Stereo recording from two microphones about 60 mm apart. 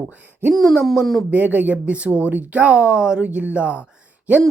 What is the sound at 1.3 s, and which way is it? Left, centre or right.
Speech, right.